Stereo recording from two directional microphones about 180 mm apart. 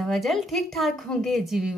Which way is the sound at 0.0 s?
Centre (ahead or behind).